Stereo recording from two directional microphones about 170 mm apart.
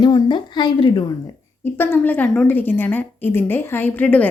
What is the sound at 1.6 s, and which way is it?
A woman's voice, 15° left (ahead or behind).